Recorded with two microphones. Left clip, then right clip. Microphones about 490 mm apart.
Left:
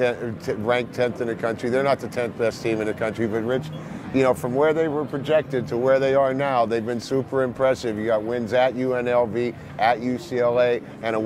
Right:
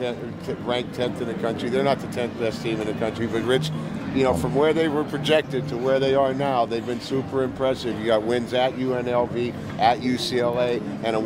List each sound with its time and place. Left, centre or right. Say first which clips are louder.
0.0 s speech: left 5 dB; left
5.7 s speech: left 3 dB; left
8.1 s speech: right 1 dB; left